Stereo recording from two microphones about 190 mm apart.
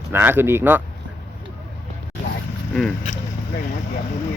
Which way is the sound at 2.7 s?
Centre (ahead or behind).